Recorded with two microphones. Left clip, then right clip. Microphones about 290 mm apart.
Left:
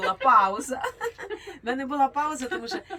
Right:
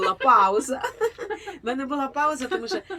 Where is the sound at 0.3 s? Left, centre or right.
Centre.